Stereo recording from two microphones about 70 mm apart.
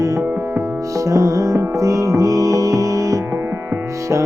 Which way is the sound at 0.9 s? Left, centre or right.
Right.